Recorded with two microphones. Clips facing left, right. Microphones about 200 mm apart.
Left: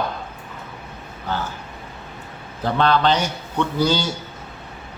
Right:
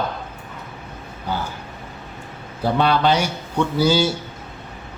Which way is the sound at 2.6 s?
10° right (ahead or behind).